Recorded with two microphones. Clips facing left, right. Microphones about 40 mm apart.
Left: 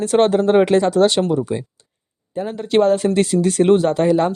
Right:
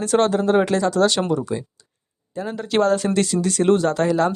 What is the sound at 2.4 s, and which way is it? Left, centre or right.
Speech, centre.